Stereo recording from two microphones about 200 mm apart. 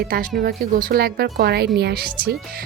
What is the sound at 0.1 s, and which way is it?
Speech, 45° right (ahead or behind).